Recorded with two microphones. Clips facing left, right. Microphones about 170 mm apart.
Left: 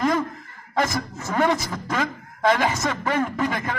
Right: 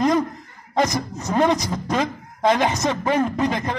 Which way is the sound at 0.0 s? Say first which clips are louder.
Right 3 dB; 20° right (ahead or behind).